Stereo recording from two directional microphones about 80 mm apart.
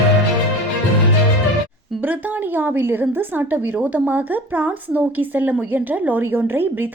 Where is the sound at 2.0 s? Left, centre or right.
Right.